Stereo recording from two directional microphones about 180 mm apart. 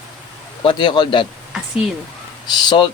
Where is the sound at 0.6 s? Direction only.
25° left (ahead or behind).